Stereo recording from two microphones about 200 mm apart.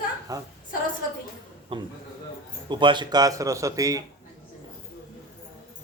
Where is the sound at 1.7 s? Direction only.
25° right (ahead or behind).